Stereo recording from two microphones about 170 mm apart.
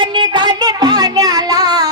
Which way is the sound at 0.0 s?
25° right (ahead or behind).